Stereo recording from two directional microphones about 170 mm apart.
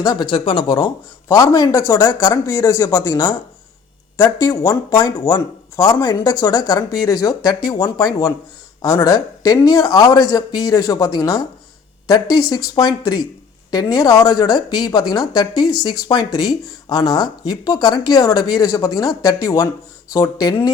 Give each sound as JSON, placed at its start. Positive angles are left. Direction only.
{"t": 0.0, "sound": "speech", "side_deg": 25}